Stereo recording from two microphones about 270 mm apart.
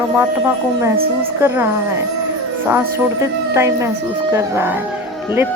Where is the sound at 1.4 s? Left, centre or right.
Centre.